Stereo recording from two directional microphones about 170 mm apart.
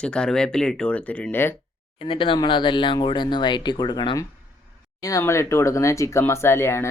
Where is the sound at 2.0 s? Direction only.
30° left (ahead or behind).